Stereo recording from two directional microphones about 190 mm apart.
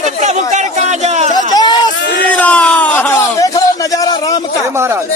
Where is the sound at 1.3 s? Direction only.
20° left (ahead or behind).